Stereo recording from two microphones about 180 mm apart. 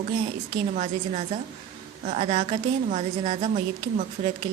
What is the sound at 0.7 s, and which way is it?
A woman's voice, 35° right (ahead or behind).